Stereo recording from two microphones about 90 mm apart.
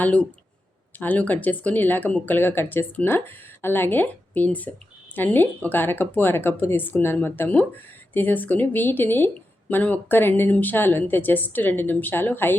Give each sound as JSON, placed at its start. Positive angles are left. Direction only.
{"t": 0.0, "sound": "speech", "side_deg": 15}